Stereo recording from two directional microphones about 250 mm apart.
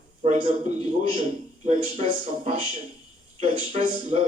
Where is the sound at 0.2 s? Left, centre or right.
Right.